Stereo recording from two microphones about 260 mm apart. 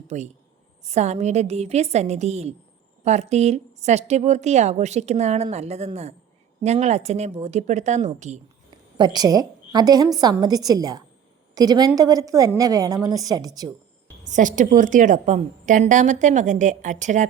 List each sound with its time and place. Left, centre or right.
0.1 s speech: right
9.0 s a woman's voice: centre
14.3 s speech: right